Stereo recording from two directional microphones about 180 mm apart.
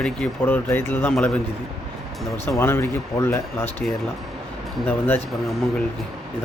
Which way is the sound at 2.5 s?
15° left (ahead or behind).